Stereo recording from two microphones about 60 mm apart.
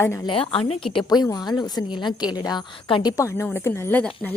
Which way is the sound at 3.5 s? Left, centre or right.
Left.